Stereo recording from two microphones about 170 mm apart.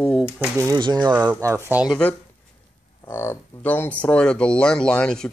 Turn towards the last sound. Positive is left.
turn(degrees=5)  # may be behind; listen again after turning